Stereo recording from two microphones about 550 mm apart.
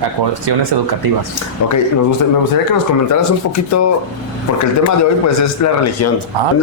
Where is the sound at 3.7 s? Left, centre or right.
Left.